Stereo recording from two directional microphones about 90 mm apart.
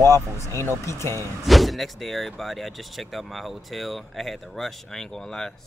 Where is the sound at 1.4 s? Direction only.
Centre (ahead or behind).